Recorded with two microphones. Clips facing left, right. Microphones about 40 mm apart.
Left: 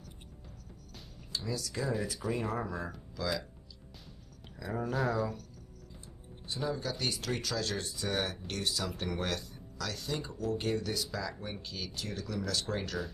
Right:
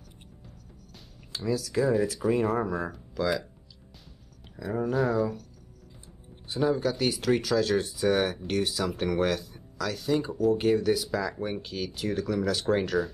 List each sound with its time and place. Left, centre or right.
1.8 s speech: centre
4.6 s speech: centre
6.6 s speech: right
6.9 s speech: centre